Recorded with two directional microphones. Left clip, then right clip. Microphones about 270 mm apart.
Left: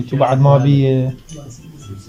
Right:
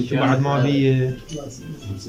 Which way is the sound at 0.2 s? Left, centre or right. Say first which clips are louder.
Left 7 dB; centre.